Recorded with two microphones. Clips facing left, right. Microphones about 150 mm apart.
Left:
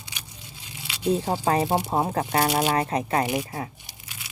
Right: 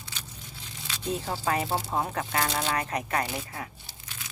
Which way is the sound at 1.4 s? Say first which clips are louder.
Left 5 dB; 35° left (ahead or behind).